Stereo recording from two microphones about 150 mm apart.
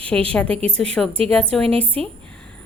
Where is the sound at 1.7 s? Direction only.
40° right (ahead or behind).